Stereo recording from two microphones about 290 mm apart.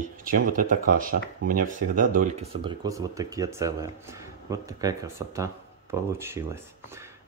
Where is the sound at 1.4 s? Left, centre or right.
Right.